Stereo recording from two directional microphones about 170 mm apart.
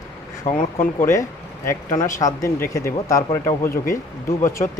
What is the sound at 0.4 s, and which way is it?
Speech, 45° left (ahead or behind).